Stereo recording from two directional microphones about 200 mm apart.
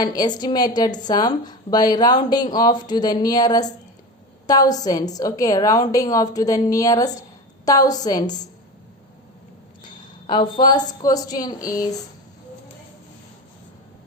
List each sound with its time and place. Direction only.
0.0 s a woman's voice: 20° left (ahead or behind)
9.8 s a sound: 20° left (ahead or behind)
11.0 s speech: 20° left (ahead or behind)